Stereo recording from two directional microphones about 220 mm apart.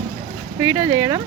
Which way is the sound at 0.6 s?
10° right (ahead or behind).